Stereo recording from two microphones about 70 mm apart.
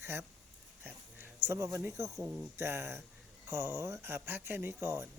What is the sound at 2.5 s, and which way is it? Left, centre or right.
Speech, right.